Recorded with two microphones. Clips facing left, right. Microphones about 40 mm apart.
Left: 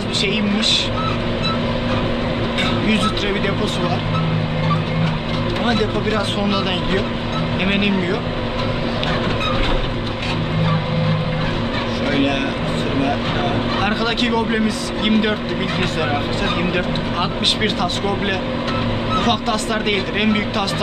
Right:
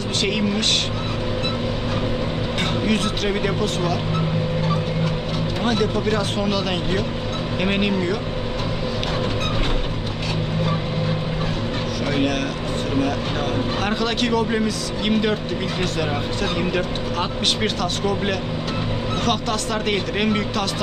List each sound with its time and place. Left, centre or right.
2.8 s speech: left
5.6 s speech: left
7.6 s speech: left
13.8 s speech: left
19.2 s speech: left